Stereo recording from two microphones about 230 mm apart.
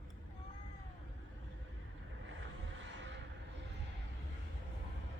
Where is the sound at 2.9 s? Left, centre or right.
Right.